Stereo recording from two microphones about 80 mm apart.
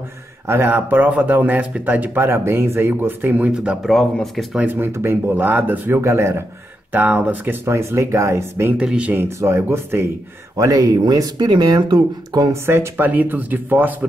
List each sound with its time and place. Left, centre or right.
0.5 s speech: right
3.8 s speech: centre
4.6 s speech: right
6.9 s speech: centre
7.6 s speech: right
8.7 s speech: centre
9.4 s speech: right
10.6 s speech: right
12.6 s speech: right